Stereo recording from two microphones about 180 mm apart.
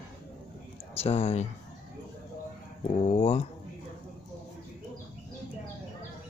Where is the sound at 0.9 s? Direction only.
35° left (ahead or behind).